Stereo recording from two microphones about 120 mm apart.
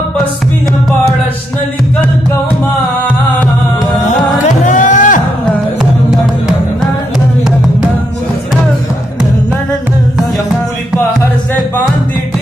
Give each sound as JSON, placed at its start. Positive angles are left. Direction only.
{"t": 4.1, "sound": "music", "side_deg": 90}